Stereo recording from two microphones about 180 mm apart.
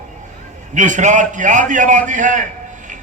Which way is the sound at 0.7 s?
45° right (ahead or behind).